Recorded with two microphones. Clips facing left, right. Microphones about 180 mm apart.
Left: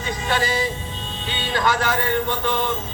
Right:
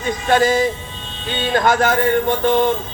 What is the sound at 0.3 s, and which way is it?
Speech, 45° right (ahead or behind).